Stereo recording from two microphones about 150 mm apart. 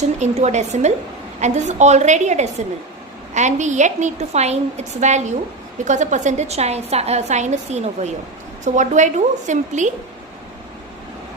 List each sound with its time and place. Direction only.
0.0 s a woman's voice: 50° right (ahead or behind)